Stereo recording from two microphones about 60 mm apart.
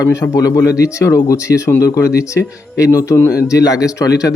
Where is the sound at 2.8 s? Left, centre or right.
Left.